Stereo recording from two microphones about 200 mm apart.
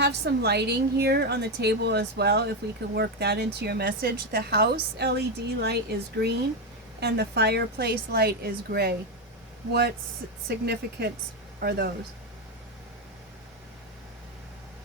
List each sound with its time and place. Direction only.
0.0 s a woman's voice: 55° right (ahead or behind)
10.5 s a woman's voice: 55° right (ahead or behind)